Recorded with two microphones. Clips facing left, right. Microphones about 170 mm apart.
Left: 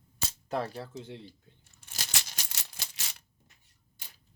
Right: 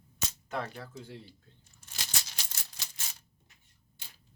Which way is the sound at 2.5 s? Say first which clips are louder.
Left 2 dB; 75° left (ahead or behind).